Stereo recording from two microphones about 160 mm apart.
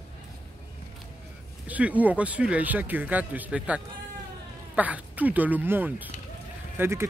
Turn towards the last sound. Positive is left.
turn(degrees=-15)  # may be behind; listen again after turning